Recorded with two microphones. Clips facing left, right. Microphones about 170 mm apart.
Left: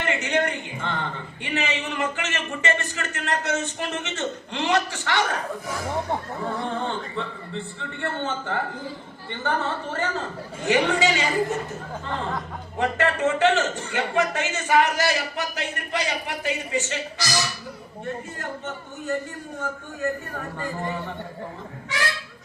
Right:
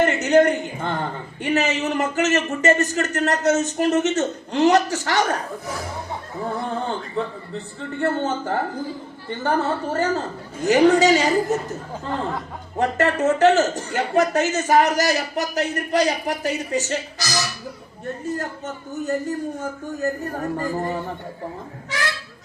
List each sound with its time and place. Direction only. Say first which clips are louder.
0.0 s speech: right 9 dB; 40° right (ahead or behind)
6.8 s speech: right 3 dB; 40° right (ahead or behind)
12.8 s speech: right 3 dB; 40° right (ahead or behind)
18.3 s speech: right 3 dB; 40° right (ahead or behind)